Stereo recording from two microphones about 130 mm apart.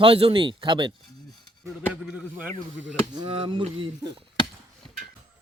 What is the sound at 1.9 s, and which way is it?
Speech, 10° right (ahead or behind).